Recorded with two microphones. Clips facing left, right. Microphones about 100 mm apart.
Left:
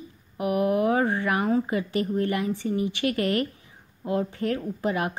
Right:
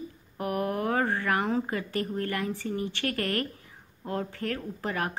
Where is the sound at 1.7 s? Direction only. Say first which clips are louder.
Left 5 dB; 15° left (ahead or behind).